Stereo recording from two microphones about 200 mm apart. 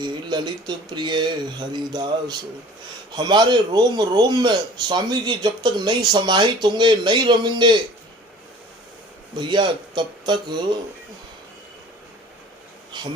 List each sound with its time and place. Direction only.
0.0 s speech: 20° right (ahead or behind)
9.3 s speech: 25° right (ahead or behind)